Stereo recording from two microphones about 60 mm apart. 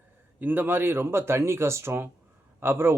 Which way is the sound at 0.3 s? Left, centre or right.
Right.